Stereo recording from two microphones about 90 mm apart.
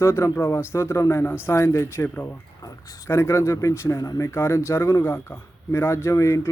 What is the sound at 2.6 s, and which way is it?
Speech, 40° left (ahead or behind).